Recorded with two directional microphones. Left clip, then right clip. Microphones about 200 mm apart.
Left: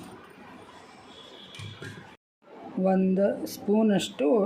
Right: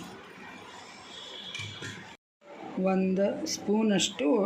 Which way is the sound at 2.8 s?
40° left (ahead or behind).